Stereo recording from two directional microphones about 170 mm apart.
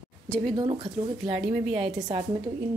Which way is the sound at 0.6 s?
30° right (ahead or behind).